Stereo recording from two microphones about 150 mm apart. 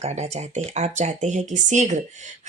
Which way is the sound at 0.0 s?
50° right (ahead or behind).